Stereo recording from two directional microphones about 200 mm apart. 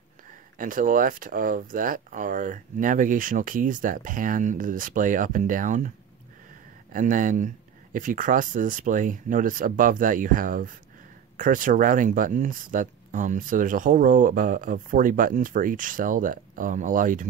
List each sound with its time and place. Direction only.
0.6 s speech: 40° right (ahead or behind)
6.9 s speech: 40° right (ahead or behind)